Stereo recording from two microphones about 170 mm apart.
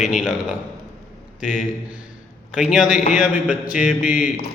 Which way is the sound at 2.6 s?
Centre (ahead or behind).